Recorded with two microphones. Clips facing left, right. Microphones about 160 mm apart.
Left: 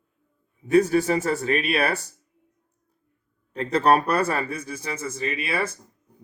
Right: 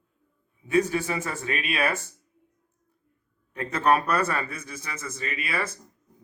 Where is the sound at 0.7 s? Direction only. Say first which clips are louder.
Left 5 dB; 40° left (ahead or behind).